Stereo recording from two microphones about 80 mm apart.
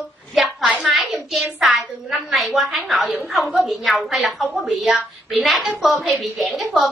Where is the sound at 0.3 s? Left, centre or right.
Centre.